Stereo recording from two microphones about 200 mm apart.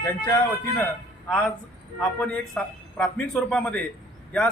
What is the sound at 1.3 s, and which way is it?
A man's voice, 5° left (ahead or behind).